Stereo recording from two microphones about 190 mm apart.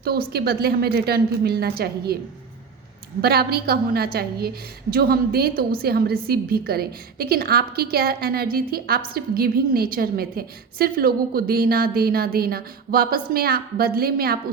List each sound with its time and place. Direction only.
0.0 s a woman's voice: 55° right (ahead or behind)
3.2 s a woman's voice: 55° right (ahead or behind)